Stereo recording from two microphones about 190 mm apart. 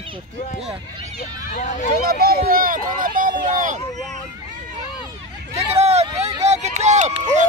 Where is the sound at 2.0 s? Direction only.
55° right (ahead or behind).